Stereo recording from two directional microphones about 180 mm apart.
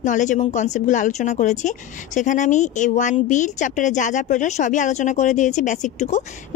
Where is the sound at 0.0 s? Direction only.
45° left (ahead or behind).